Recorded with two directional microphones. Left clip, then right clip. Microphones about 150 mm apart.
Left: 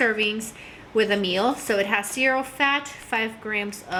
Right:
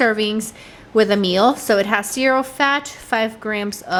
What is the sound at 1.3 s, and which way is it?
A woman's voice, 30° right (ahead or behind).